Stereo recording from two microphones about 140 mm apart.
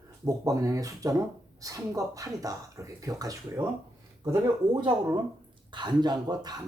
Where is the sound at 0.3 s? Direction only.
25° right (ahead or behind).